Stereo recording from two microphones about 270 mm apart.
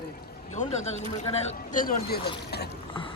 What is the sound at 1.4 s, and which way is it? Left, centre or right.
Speech, left.